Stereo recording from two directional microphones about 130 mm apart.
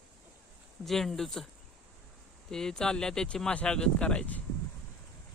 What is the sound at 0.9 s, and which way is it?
Speech, 5° left (ahead or behind).